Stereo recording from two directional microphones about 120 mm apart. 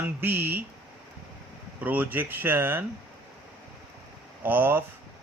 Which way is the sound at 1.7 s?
15° right (ahead or behind).